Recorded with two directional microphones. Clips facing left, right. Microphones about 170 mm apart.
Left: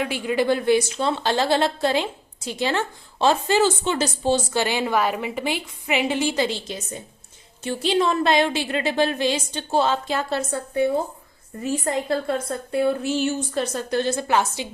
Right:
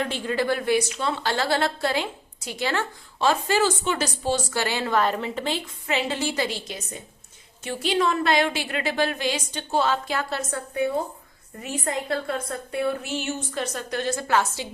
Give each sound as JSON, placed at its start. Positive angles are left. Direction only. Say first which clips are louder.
{"t": 0.0, "sound": "a woman's voice", "louder": "left 3 dB", "side_deg": 10}